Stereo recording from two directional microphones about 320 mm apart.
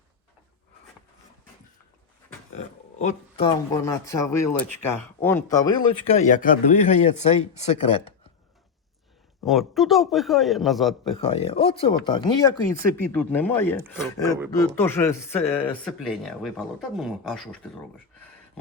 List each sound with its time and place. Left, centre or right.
3.0 s speech: centre
9.5 s speech: centre
11.2 s speech: centre